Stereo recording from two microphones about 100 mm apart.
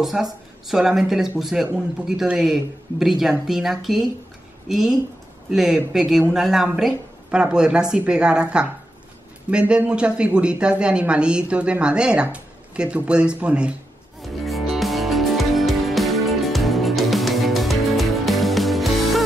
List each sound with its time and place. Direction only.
0.0 s speech: centre (ahead or behind)
14.2 s music: centre (ahead or behind)